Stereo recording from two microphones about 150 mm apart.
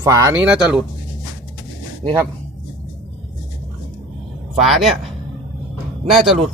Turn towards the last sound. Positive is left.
turn(degrees=0)  # may be behind; listen again after turning